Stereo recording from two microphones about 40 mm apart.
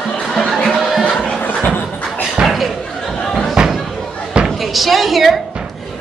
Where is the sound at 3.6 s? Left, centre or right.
Right.